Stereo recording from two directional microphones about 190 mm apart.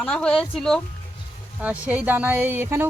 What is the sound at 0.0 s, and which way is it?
Speech, 5° left (ahead or behind).